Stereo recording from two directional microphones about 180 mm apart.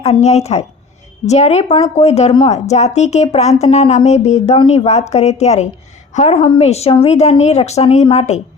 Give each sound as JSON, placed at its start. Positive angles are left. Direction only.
{"t": 0.0, "sound": "a woman's voice", "side_deg": 35}